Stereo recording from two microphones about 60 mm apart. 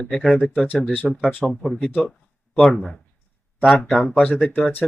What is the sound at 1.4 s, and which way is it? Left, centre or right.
Speech, centre.